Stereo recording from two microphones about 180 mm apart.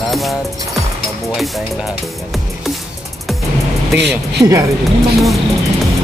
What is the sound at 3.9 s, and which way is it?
Speech, 70° right (ahead or behind).